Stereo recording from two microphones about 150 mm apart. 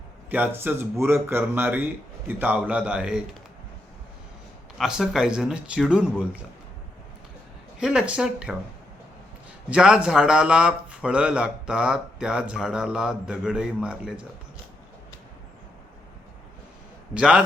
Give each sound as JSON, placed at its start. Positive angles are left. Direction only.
{"t": 0.3, "sound": "speech", "side_deg": -10}
{"t": 4.8, "sound": "a man's voice", "side_deg": -5}
{"t": 7.8, "sound": "a man's voice", "side_deg": -5}
{"t": 9.6, "sound": "a man's voice", "side_deg": -5}
{"t": 17.2, "sound": "a man's voice", "side_deg": -5}